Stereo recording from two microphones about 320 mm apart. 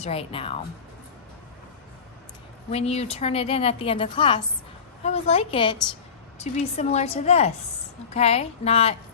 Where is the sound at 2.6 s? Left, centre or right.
Centre.